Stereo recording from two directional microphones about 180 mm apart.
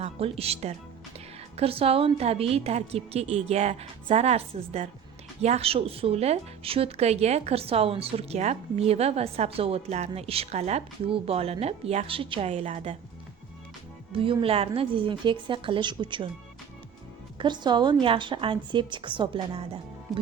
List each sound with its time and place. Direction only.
0.0 s a woman's voice: 35° right (ahead or behind)
14.2 s a woman's voice: 30° right (ahead or behind)
17.3 s a woman's voice: 25° right (ahead or behind)
20.1 s speech: centre (ahead or behind)